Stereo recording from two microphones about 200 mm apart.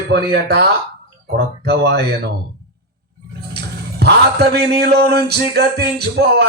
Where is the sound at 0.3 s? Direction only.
55° right (ahead or behind).